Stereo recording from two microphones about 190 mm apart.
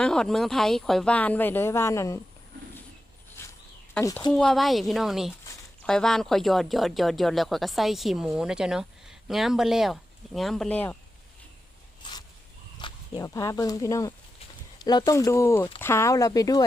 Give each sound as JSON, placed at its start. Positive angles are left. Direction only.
{"t": 0.0, "sound": "speech", "side_deg": 5}
{"t": 4.0, "sound": "speech", "side_deg": 15}
{"t": 4.3, "sound": "speech", "side_deg": 5}
{"t": 12.8, "sound": "speech", "side_deg": 15}